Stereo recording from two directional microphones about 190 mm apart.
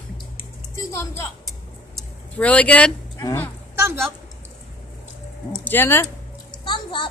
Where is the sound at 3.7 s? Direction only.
15° right (ahead or behind).